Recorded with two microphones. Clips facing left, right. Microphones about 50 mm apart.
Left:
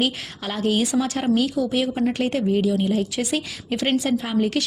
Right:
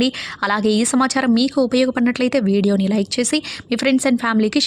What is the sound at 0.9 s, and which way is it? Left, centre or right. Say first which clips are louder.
A woman's voice: right 6 dB; right.